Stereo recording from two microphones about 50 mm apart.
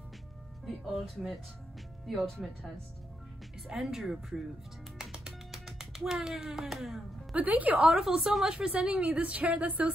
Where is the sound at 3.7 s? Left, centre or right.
Centre.